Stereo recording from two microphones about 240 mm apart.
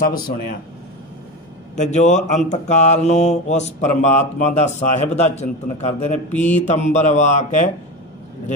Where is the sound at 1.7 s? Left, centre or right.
Left.